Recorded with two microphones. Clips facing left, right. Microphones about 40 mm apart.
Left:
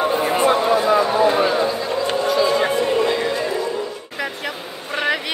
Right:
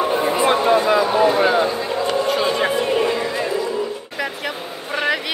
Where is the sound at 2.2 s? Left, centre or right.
Right.